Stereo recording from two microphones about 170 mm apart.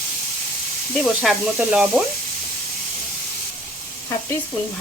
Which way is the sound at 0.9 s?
Centre (ahead or behind).